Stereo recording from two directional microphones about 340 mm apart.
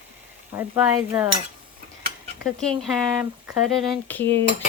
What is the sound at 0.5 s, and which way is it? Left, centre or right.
Cutlery, centre.